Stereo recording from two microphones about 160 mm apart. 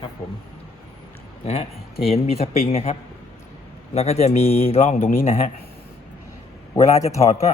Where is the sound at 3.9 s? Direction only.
40° left (ahead or behind).